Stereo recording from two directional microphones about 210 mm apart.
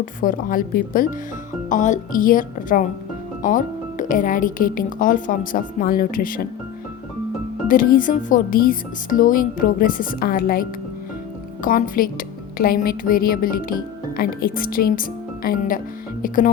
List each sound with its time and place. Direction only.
0.0 s speech: 40° left (ahead or behind)
7.7 s speech: 40° left (ahead or behind)